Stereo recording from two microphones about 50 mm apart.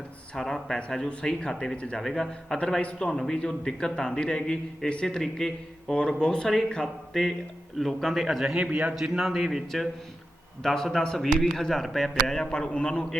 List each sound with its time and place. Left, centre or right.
0.3 s a man's voice: centre
2.0 s a man's voice: centre
5.0 s a man's voice: centre
6.8 s a man's voice: centre
8.7 s a man's voice: right
9.1 s a man's voice: centre
12.4 s a man's voice: centre